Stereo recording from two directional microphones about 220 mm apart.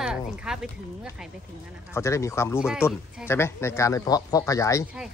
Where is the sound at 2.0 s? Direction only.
15° left (ahead or behind).